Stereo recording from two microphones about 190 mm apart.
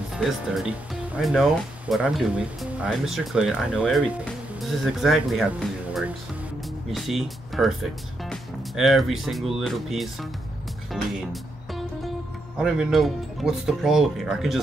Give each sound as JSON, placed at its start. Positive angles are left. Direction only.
{"t": 0.1, "sound": "speech", "side_deg": 0}
{"t": 12.5, "sound": "speech", "side_deg": -5}